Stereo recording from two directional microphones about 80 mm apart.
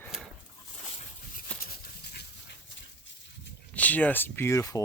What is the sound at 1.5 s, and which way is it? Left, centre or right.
Dog, centre.